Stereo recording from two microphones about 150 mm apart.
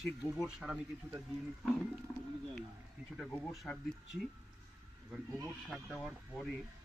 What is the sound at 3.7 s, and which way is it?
Speech, 5° left (ahead or behind).